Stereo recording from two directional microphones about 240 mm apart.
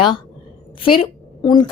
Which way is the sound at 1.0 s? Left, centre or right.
Centre.